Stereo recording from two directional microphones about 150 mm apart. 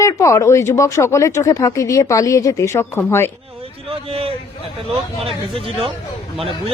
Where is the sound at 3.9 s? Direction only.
40° right (ahead or behind).